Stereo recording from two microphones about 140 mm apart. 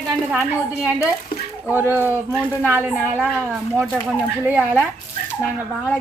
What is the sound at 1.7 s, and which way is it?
Speech, 15° right (ahead or behind).